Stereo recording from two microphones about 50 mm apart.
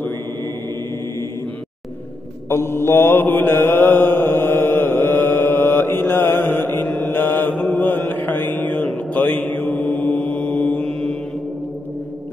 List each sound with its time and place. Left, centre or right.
2.5 s mantra: left
10.9 s mantra: centre